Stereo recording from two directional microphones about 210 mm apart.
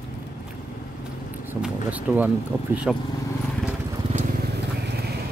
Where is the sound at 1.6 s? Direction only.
5° right (ahead or behind).